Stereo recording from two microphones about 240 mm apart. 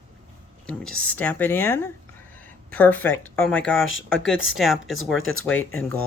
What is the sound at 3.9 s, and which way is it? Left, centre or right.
Speech, left.